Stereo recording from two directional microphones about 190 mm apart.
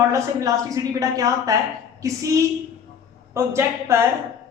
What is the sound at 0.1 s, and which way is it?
A woman's voice, 15° right (ahead or behind).